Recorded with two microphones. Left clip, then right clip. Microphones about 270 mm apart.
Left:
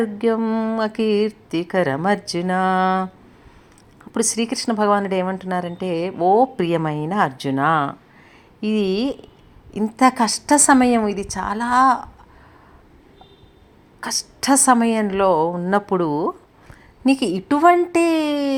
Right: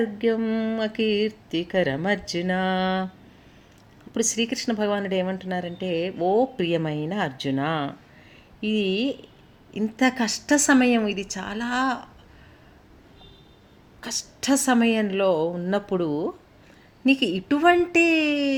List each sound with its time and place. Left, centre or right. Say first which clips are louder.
0.0 s speech: left 4 dB; centre
4.1 s a woman's voice: left 3 dB; centre
14.0 s a woman's voice: left 6 dB; centre